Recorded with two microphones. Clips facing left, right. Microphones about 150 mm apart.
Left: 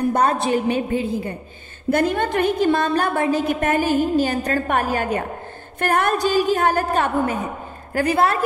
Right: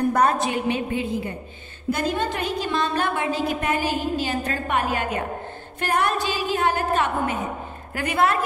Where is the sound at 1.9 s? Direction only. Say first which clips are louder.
Left 6 dB; 60° left (ahead or behind).